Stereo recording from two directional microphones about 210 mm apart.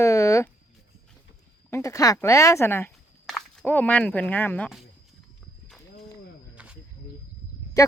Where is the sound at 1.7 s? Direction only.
15° left (ahead or behind).